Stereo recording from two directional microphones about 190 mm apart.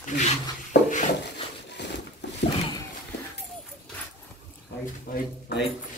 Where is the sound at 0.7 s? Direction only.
65° left (ahead or behind).